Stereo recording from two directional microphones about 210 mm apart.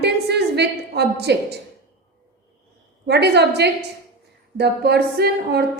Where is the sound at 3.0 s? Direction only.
50° right (ahead or behind).